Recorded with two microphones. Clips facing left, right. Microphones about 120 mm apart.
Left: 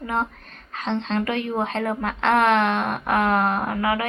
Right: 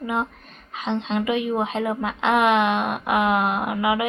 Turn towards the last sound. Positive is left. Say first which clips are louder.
# right 1 dB
turn(degrees=-15)  # may be behind; listen again after turning